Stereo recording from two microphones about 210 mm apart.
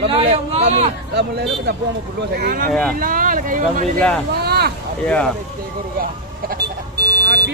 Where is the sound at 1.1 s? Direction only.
55° right (ahead or behind).